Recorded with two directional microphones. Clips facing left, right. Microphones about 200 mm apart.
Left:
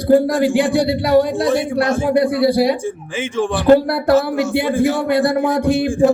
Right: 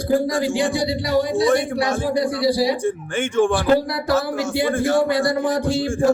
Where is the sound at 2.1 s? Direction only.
60° left (ahead or behind).